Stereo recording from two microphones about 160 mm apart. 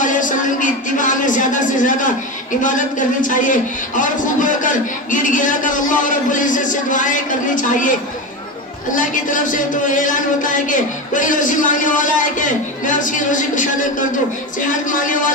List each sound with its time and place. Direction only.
0.0 s speech: 55° left (ahead or behind)